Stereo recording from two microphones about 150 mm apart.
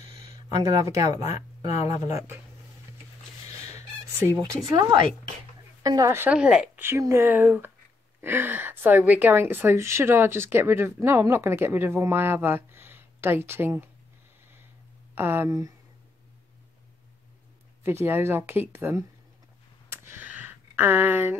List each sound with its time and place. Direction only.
0.7 s speech: 20° right (ahead or behind)
1.2 s speech: 50° left (ahead or behind)
2.0 s speech: 20° right (ahead or behind)
4.2 s a woman's voice: 20° right (ahead or behind)
15.1 s a woman's voice: 15° right (ahead or behind)
17.8 s a woman's voice: 15° right (ahead or behind)
19.9 s a sound: 15° right (ahead or behind)